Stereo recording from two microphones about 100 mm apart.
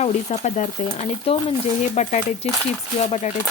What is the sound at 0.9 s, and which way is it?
Speech, 80° left.